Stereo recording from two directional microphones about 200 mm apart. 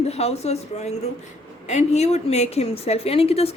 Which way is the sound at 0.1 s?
30° left (ahead or behind).